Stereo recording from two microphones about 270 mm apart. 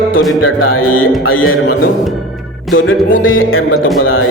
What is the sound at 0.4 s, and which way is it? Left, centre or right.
Speech, left.